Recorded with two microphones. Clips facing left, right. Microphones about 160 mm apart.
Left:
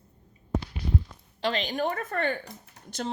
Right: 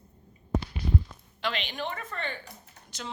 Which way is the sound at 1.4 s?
40° left (ahead or behind).